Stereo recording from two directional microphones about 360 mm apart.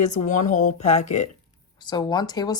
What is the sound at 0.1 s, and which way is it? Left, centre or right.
Speech, left.